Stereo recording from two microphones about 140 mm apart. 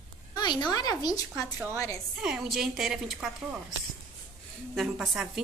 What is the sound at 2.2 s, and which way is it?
A woman's voice, 5° right (ahead or behind).